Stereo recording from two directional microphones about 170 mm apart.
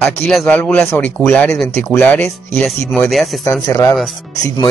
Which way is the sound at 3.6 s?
20° left (ahead or behind).